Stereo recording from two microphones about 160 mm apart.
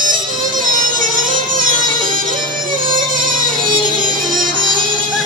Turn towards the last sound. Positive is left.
turn(degrees=-60)  # may be behind; listen again after turning